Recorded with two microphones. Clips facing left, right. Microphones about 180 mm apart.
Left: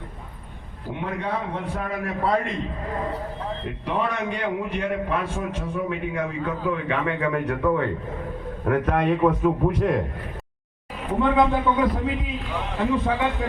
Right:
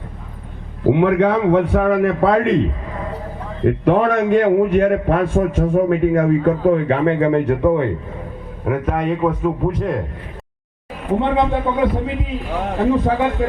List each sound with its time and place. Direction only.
0.9 s a man's voice: 75° right (ahead or behind)
3.7 s a man's voice: 55° right (ahead or behind); by 7.9 s 25° right (ahead or behind)
8.6 s a man's voice: 5° right (ahead or behind)
11.2 s a man's voice: 25° right (ahead or behind)
12.6 s a man's voice: 45° right (ahead or behind)